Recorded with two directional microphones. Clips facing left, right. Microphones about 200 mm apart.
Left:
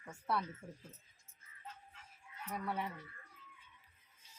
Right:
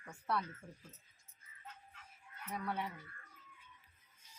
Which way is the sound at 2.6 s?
5° left (ahead or behind).